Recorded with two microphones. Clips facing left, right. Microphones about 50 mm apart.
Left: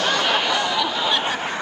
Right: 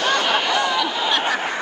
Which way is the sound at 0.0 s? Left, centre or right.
Centre.